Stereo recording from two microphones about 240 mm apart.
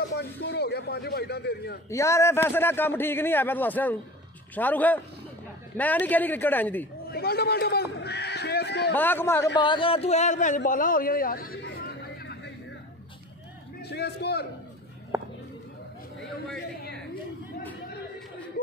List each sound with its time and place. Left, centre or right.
0.1 s a man's voice: left
1.9 s a man's voice: centre
7.1 s a man's voice: left
8.9 s a man's voice: centre
9.6 s a man's voice: left
13.8 s a man's voice: left
15.1 s a sound: centre